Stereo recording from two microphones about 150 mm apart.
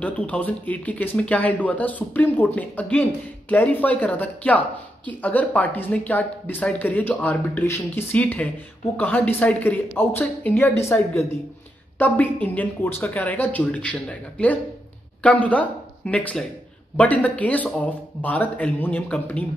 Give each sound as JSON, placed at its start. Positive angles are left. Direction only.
{"t": 0.0, "sound": "speech", "side_deg": 10}